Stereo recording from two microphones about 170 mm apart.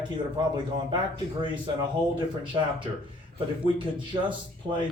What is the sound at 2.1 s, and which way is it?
A man's voice, 30° right (ahead or behind).